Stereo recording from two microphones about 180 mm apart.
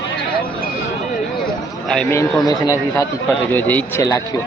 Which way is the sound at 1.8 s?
5° left (ahead or behind).